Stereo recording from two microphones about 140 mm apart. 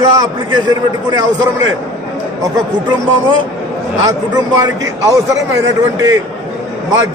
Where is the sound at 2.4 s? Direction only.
35° right (ahead or behind).